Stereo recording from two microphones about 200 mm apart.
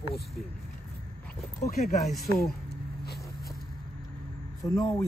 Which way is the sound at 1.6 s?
40° left (ahead or behind).